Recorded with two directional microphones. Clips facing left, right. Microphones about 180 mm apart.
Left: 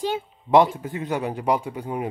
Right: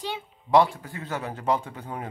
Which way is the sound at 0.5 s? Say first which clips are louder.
Left 3 dB; 20° left (ahead or behind).